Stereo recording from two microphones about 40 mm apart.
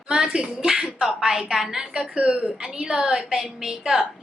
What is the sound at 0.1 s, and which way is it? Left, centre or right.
A woman's voice, centre.